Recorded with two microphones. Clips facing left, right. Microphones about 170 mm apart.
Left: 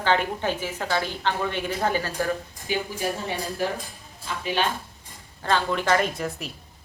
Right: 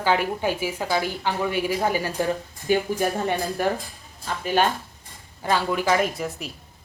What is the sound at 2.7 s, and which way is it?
Speech, 55° right (ahead or behind).